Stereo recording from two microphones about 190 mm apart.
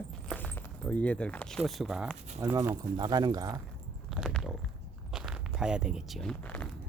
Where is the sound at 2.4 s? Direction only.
10° right (ahead or behind).